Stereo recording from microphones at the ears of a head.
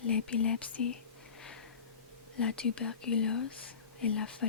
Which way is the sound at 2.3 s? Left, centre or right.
Left.